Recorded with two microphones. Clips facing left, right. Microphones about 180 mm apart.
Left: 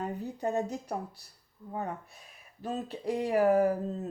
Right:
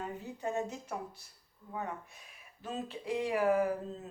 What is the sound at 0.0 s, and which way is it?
Speech, 40° left (ahead or behind).